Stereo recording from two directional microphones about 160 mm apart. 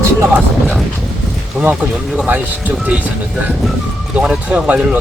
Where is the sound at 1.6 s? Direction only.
5° right (ahead or behind).